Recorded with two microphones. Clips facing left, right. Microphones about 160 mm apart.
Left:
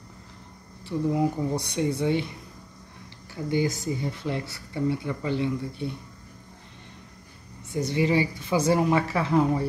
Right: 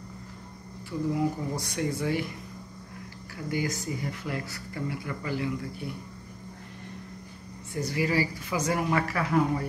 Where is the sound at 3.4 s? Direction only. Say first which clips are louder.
Left 5 dB; 25° left (ahead or behind).